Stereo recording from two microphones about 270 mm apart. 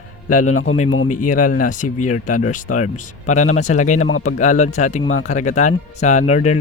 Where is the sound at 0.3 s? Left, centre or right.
Left.